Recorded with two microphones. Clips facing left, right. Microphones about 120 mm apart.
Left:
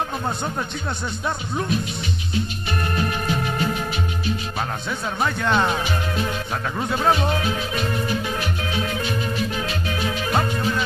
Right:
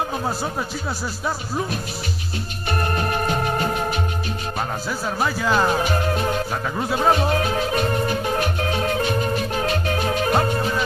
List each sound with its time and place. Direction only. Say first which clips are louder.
1.2 s speech: right 1 dB; 5° right (ahead or behind)
2.8 s music: right 2 dB; 45° right (ahead or behind)
5.2 s speech: right 1 dB; 5° right (ahead or behind)
5.8 s music: right 3 dB; 40° right (ahead or behind)
6.8 s speech: right 1 dB; 5° right (ahead or behind)
7.3 s music: right 4 dB; 45° right (ahead or behind)